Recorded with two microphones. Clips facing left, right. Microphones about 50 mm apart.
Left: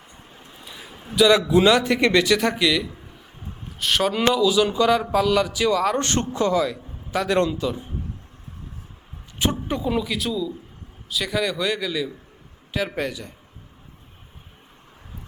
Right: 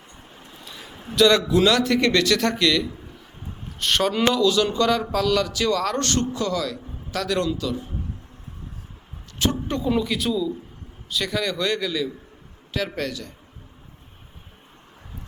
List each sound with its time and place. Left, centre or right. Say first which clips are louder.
0.3 s vehicle: even; centre
1.0 s a man's voice: left 1 dB; centre; by 7.9 s left
9.4 s a man's voice: even; centre